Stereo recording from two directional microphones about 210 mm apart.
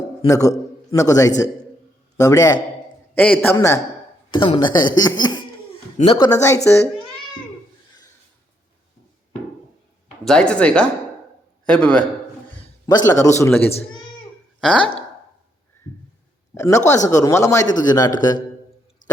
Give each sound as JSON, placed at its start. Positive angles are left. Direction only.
{"t": 0.2, "sound": "a man's voice", "side_deg": 15}
{"t": 10.2, "sound": "a man's voice", "side_deg": 5}
{"t": 12.5, "sound": "a man's voice", "side_deg": 20}
{"t": 13.7, "sound": "speech", "side_deg": 30}
{"t": 14.6, "sound": "speech", "side_deg": 5}
{"t": 16.6, "sound": "speech", "side_deg": 15}
{"t": 19.0, "sound": "a sound", "side_deg": 40}